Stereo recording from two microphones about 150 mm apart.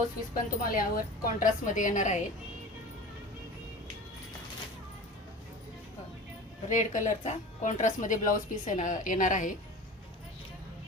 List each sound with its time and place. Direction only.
0.6 s a woman's voice: 75° left (ahead or behind); by 2.2 s 55° left (ahead or behind)
6.7 s a woman's voice: 55° left (ahead or behind)